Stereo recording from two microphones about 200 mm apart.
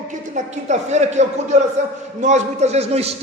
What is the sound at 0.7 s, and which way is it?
A man's voice, 35° right (ahead or behind).